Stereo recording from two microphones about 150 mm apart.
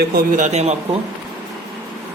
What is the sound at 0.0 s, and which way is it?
Speech, 90° right.